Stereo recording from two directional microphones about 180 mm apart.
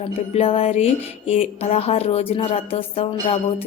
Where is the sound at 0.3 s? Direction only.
35° left (ahead or behind).